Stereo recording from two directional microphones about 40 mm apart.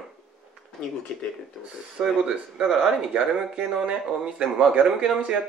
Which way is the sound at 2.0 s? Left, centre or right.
Centre.